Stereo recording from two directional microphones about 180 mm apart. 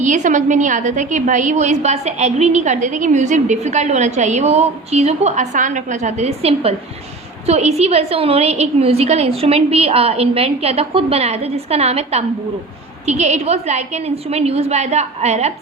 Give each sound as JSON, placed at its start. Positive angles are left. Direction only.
{"t": 0.0, "sound": "a woman's voice", "side_deg": -45}